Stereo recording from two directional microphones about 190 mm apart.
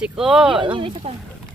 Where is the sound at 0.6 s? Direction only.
25° right (ahead or behind).